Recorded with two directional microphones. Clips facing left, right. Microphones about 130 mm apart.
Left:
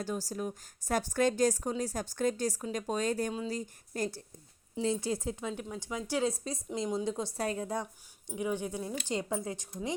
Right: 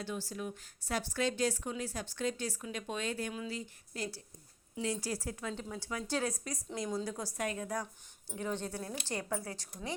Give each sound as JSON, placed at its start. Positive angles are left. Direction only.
{"t": 0.0, "sound": "a woman's voice", "side_deg": 40}
{"t": 4.7, "sound": "a woman's voice", "side_deg": 25}
{"t": 8.4, "sound": "speech", "side_deg": 10}